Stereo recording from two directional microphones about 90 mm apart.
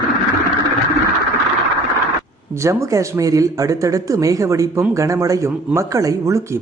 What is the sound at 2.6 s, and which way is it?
Speech, 35° right (ahead or behind).